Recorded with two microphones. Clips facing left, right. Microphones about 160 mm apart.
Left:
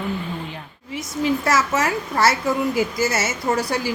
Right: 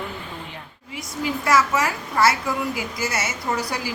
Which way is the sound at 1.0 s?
25° left (ahead or behind).